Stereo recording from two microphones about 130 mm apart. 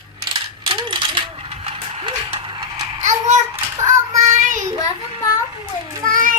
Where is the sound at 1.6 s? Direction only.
45° right (ahead or behind).